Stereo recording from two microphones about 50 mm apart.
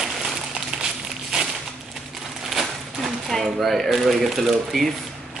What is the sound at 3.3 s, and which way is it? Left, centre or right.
Speech, centre.